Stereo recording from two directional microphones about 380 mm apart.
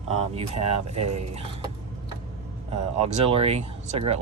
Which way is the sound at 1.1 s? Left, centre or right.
Centre.